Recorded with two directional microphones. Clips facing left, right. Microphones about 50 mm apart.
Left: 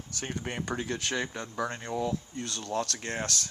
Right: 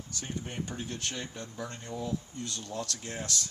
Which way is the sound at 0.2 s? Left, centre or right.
Left.